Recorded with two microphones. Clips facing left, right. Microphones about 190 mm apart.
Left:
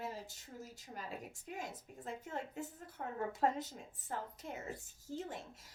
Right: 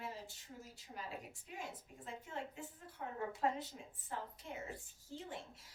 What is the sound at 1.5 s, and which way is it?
A woman's voice, 45° left (ahead or behind).